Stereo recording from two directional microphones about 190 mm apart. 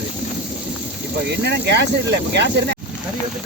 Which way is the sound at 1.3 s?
60° right (ahead or behind).